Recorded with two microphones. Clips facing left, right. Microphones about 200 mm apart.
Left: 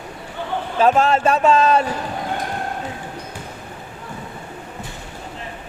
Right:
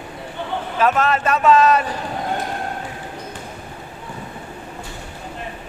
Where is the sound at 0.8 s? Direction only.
30° left (ahead or behind).